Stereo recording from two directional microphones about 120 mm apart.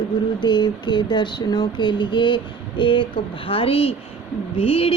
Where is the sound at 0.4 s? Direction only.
40° left (ahead or behind).